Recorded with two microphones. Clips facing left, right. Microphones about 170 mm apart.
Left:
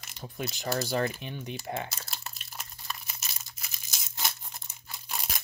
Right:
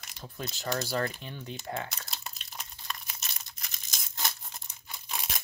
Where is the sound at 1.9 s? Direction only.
5° left (ahead or behind).